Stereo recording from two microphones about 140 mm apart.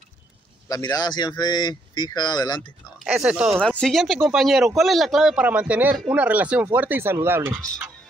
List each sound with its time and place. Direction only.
0.7 s speech: 25° left (ahead or behind)
3.0 s speech: 5° right (ahead or behind)
3.6 s speech: 5° left (ahead or behind); by 7.5 s 20° right (ahead or behind)